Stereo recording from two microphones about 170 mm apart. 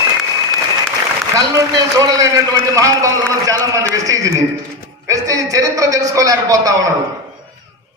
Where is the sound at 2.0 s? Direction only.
20° right (ahead or behind).